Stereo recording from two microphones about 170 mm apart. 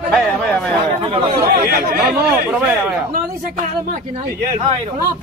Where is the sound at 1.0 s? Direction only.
30° right (ahead or behind).